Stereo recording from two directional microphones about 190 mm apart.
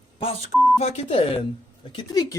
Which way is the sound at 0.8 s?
30° left (ahead or behind).